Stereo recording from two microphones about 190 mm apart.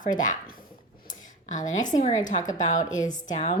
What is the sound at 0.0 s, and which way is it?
Speech, 45° left (ahead or behind).